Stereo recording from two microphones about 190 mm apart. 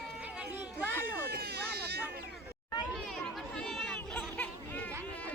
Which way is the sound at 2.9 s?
Centre (ahead or behind).